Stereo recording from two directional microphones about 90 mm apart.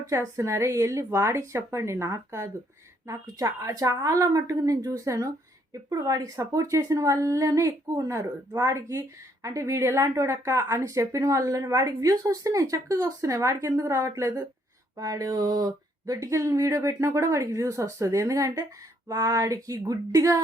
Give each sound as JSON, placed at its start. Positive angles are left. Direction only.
{"t": 0.0, "sound": "a woman's voice", "side_deg": -35}
{"t": 14.9, "sound": "a woman's voice", "side_deg": -40}